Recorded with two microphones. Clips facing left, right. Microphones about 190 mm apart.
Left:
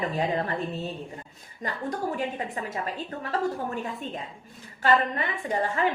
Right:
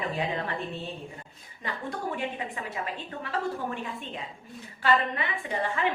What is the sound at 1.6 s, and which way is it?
Speech, 40° left (ahead or behind).